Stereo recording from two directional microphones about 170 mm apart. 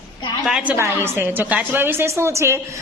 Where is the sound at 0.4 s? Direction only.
5° right (ahead or behind).